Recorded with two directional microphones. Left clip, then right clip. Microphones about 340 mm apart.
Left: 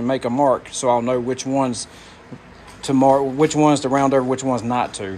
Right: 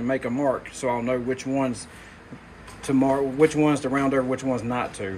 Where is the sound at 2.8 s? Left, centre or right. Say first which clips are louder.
Left 7 dB; centre.